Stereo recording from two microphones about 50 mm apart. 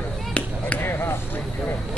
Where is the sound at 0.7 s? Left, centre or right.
Left.